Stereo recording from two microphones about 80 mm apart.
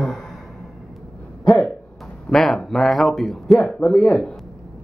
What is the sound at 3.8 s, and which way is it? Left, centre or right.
Speech, centre.